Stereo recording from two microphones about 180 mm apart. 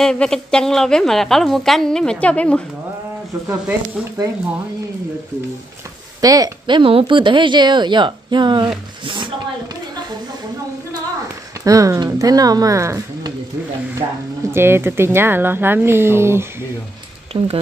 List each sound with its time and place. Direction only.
0.0 s a woman's voice: 5° left (ahead or behind)
3.4 s speech: 10° right (ahead or behind)
6.2 s speech: 20° right (ahead or behind)
9.0 s a sound: 25° right (ahead or behind)
11.6 s speech: 20° right (ahead or behind)
14.5 s speech: 15° right (ahead or behind)
17.3 s speech: 30° right (ahead or behind)